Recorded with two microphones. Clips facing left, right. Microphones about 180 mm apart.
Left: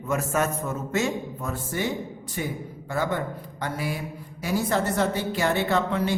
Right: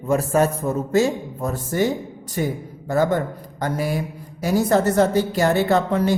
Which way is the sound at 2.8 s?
40° right (ahead or behind).